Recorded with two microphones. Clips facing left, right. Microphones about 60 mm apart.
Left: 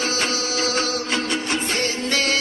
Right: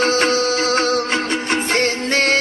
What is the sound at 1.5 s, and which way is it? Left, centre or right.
Music, right.